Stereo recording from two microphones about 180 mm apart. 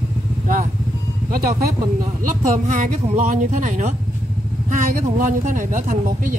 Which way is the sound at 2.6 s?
45° right (ahead or behind).